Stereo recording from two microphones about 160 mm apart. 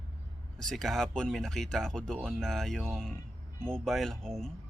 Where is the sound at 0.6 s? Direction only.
Centre (ahead or behind).